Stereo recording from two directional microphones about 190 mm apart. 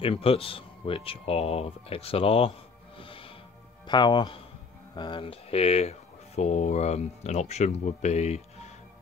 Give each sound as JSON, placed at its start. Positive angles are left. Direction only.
{"t": 0.0, "sound": "speech", "side_deg": 30}
{"t": 3.0, "sound": "music", "side_deg": 30}
{"t": 3.8, "sound": "speech", "side_deg": 25}